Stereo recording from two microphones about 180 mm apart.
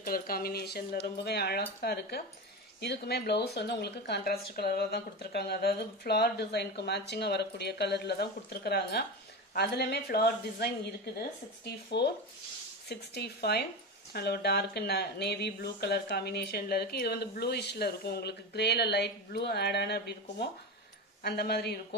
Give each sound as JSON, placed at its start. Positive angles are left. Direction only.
{"t": 0.0, "sound": "a woman's voice", "side_deg": 55}
{"t": 21.2, "sound": "a woman's voice", "side_deg": 60}